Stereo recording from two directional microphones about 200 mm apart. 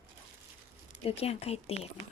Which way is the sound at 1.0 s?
30° left (ahead or behind).